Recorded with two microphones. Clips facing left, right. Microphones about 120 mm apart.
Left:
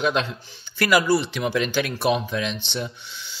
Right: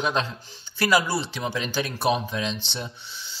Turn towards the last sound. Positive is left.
turn(degrees=-35)  # may be behind; listen again after turning